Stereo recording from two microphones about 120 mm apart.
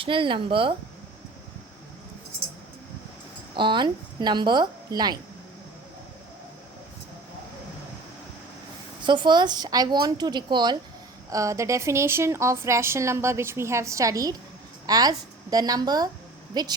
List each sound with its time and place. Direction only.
0.0 s speech: 45° right (ahead or behind)
3.5 s a woman's voice: 40° right (ahead or behind)
9.0 s a woman's voice: 40° right (ahead or behind)
11.3 s a woman's voice: 25° right (ahead or behind)